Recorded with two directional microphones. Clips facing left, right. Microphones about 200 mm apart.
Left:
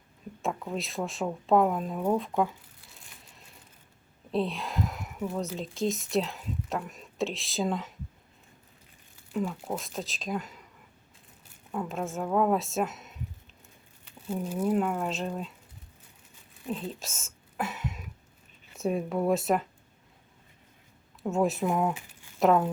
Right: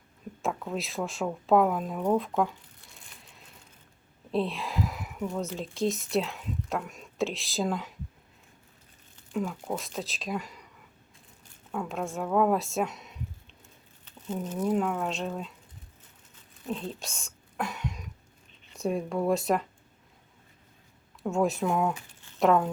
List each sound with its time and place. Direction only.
0.4 s speech: centre (ahead or behind)
2.4 s crumpling: 5° left (ahead or behind)
4.3 s speech: centre (ahead or behind)
9.1 s speech: centre (ahead or behind)
11.7 s speech: centre (ahead or behind)
16.6 s a sound: centre (ahead or behind)
18.7 s speech: centre (ahead or behind)
21.2 s speech: centre (ahead or behind)